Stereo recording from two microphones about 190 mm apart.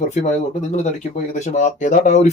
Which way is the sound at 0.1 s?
35° left (ahead or behind).